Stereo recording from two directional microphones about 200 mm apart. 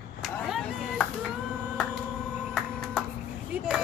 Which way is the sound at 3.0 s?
Centre (ahead or behind).